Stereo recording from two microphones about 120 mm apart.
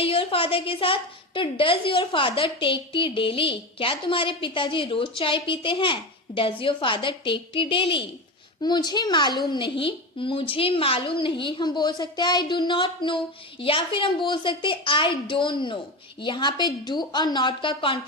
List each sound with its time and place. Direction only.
0.0 s a woman's voice: 50° left (ahead or behind)
8.6 s a woman's voice: 35° left (ahead or behind)